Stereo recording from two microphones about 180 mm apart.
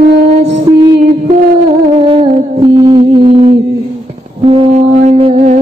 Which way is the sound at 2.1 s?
30° right (ahead or behind).